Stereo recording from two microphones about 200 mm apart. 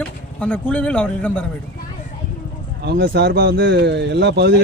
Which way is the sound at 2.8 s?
60° right (ahead or behind).